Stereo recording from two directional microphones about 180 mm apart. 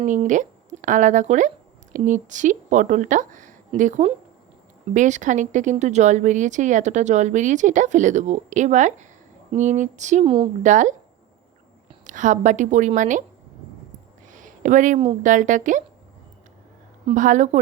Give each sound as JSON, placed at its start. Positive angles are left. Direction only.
{"t": 0.0, "sound": "speech", "side_deg": -45}
{"t": 10.2, "sound": "a woman's voice", "side_deg": -25}
{"t": 10.6, "sound": "speech", "side_deg": -45}
{"t": 12.0, "sound": "speech", "side_deg": -45}
{"t": 14.3, "sound": "speech", "side_deg": -45}
{"t": 17.1, "sound": "speech", "side_deg": -45}